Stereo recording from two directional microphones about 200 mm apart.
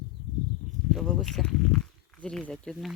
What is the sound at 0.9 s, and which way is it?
Speech, centre (ahead or behind).